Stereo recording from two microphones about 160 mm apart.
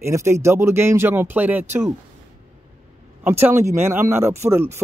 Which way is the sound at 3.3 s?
15° right (ahead or behind).